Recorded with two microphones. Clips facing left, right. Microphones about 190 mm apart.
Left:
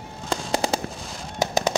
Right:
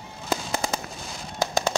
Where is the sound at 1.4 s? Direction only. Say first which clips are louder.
Left 2 dB; 20° left (ahead or behind).